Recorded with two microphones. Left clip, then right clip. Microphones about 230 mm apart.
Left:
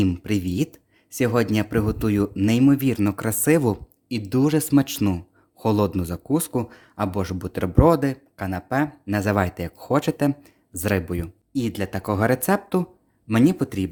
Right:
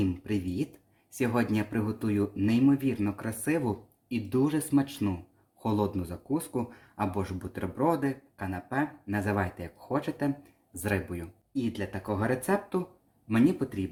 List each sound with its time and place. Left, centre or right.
0.0 s speech: left